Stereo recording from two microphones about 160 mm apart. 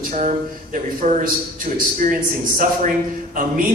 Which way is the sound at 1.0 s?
50° right (ahead or behind).